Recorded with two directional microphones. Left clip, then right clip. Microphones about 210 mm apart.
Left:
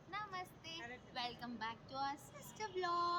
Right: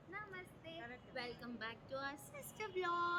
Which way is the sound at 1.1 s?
35° left (ahead or behind).